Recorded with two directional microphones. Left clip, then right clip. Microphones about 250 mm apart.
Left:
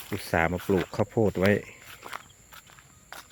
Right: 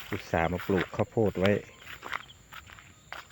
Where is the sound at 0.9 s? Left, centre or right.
Left.